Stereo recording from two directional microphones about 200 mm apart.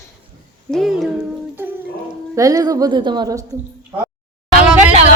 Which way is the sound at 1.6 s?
10° right (ahead or behind).